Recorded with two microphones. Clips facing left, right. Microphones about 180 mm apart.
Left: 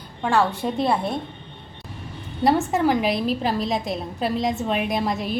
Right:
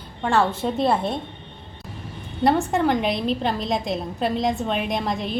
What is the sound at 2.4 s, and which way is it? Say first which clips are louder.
A woman's voice: even; centre (ahead or behind).